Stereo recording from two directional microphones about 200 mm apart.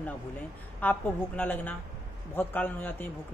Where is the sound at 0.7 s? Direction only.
10° left (ahead or behind).